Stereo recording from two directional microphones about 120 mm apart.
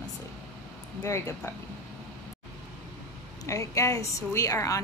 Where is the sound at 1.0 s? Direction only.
20° left (ahead or behind).